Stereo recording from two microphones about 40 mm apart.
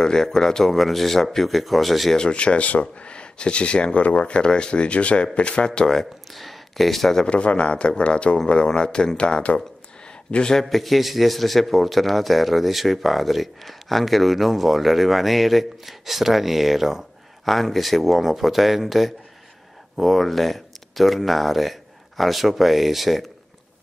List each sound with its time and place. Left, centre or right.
0.0 s speech: centre
2.1 s speech: left
5.8 s speech: centre
6.3 s speech: centre
7.2 s speech: left
10.4 s speech: centre
10.7 s a man's voice: centre